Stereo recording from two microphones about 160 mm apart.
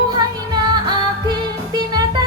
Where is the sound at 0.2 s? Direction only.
25° right (ahead or behind).